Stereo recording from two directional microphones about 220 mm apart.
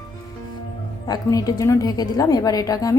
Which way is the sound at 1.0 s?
15° left (ahead or behind).